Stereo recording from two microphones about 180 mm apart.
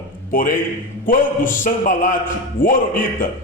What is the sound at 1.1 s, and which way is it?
A man's voice, 50° left (ahead or behind).